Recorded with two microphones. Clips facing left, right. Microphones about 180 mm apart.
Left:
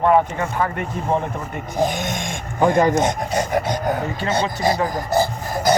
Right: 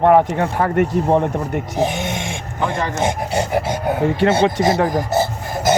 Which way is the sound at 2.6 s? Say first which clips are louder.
Left 6 dB; 40° left (ahead or behind).